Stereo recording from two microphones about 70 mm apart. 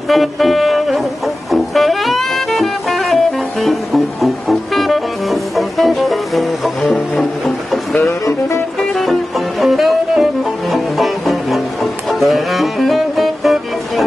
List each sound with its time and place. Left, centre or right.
0.1 s music: centre
8.3 s music: left
8.7 s music: centre